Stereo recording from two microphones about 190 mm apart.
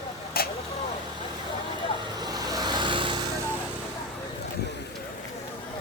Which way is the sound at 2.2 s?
20° right (ahead or behind).